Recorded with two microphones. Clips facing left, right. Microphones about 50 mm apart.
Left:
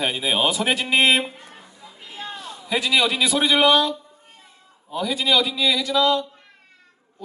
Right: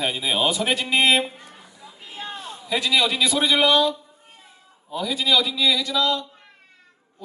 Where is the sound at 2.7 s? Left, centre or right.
Centre.